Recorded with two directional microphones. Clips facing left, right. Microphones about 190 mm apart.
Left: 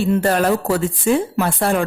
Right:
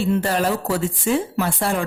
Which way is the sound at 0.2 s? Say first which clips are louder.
Left 4 dB; 55° left (ahead or behind).